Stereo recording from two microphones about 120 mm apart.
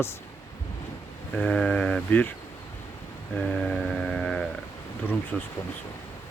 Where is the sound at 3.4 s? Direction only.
10° left (ahead or behind).